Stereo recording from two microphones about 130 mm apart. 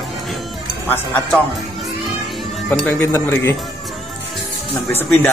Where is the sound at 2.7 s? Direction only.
10° left (ahead or behind).